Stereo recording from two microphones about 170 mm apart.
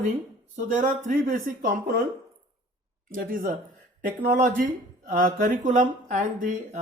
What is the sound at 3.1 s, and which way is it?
Speech, 55° right (ahead or behind).